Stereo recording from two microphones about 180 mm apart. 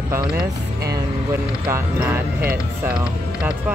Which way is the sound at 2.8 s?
5° right (ahead or behind).